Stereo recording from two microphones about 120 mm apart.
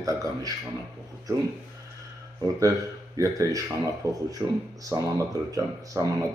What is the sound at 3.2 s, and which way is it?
Speech, 25° right (ahead or behind).